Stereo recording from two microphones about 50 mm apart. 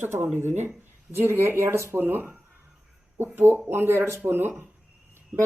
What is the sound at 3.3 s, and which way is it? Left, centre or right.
Speech, right.